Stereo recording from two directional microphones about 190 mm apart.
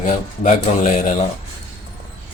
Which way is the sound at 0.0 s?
40° left (ahead or behind).